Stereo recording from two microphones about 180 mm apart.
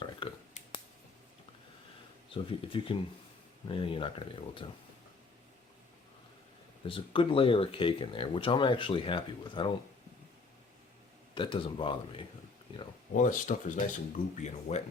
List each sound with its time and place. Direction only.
0.2 s a sound: 30° left (ahead or behind)
2.3 s speech: 30° left (ahead or behind)
6.8 s speech: 30° left (ahead or behind)
11.3 s speech: 30° left (ahead or behind)
13.1 s speech: 45° left (ahead or behind)